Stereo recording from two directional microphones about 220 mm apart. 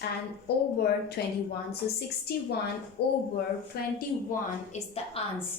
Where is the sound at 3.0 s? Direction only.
45° left (ahead or behind).